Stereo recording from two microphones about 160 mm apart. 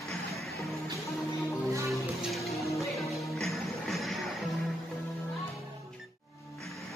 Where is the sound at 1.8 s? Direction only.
Centre (ahead or behind).